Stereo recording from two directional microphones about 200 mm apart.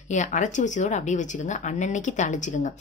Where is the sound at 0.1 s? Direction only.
40° left (ahead or behind).